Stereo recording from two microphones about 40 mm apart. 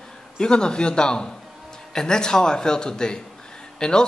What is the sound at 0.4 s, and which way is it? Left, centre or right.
A man's voice, left.